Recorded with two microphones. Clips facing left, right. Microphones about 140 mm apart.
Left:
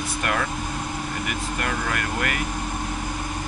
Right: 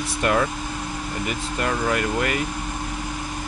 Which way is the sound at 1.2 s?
25° right (ahead or behind).